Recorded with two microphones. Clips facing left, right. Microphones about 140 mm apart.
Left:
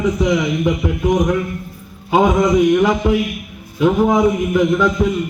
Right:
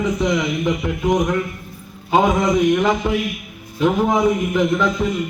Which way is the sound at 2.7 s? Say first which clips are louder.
Left 4 dB; 10° left (ahead or behind).